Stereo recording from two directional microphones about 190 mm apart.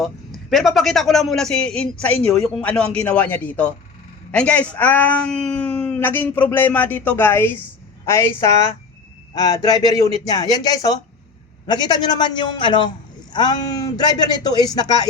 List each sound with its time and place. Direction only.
0.5 s a man's voice: centre (ahead or behind); by 14.8 s 20° left (ahead or behind)